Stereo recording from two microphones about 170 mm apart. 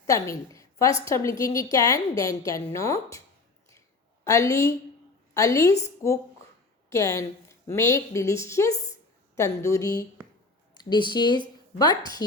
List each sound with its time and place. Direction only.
0.1 s a woman's voice: 20° left (ahead or behind)
3.7 s a sound: 15° left (ahead or behind)
5.3 s a woman's voice: 20° left (ahead or behind)
6.9 s a woman's voice: 20° left (ahead or behind)